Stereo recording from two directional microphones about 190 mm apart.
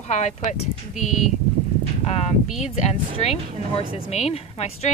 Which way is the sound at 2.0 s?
35° left (ahead or behind).